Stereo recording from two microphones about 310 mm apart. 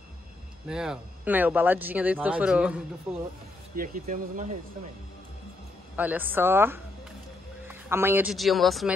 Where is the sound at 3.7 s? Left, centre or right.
Right.